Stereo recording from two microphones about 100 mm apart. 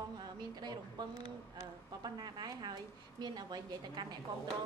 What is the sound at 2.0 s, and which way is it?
A woman's voice, 45° right (ahead or behind).